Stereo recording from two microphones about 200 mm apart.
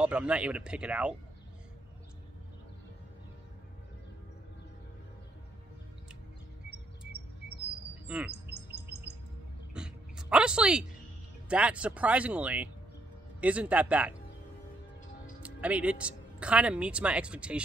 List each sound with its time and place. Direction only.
0.0 s speech: 5° right (ahead or behind)
8.3 s bird: 55° right (ahead or behind)
9.8 s a sound: 5° right (ahead or behind)
11.4 s speech: 5° right (ahead or behind)
15.4 s speech: 5° right (ahead or behind)